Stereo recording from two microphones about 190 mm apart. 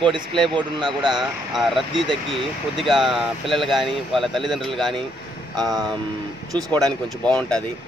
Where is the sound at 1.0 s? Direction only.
Centre (ahead or behind).